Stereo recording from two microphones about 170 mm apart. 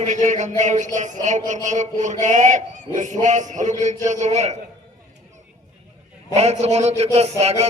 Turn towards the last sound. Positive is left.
turn(degrees=-40)  # may be behind; listen again after turning